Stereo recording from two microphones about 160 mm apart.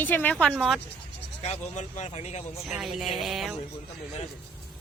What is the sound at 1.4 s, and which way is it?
Speech, 45° left (ahead or behind).